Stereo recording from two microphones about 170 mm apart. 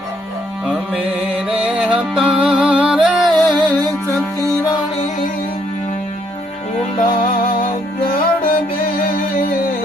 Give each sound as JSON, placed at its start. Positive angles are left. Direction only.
{"t": 1.5, "sound": "music", "side_deg": -5}
{"t": 7.6, "sound": "music", "side_deg": 60}